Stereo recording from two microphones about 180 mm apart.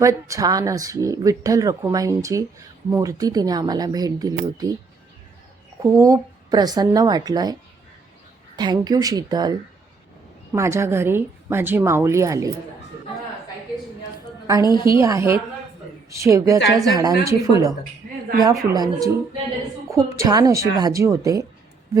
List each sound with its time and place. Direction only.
0.0 s speech: 15° right (ahead or behind)
5.8 s speech: 20° right (ahead or behind)
8.5 s a woman's voice: 25° right (ahead or behind)
14.6 s a woman's voice: 25° left (ahead or behind)
14.9 s a woman's voice: 15° right (ahead or behind)